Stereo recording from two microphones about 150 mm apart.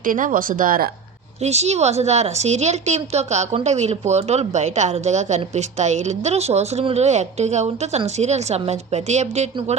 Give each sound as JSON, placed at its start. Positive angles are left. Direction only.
{"t": 0.0, "sound": "speech", "side_deg": -65}
{"t": 1.4, "sound": "a woman's voice", "side_deg": -45}